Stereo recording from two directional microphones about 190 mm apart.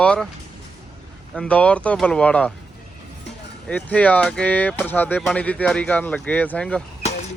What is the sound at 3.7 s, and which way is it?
Speech, 10° left (ahead or behind).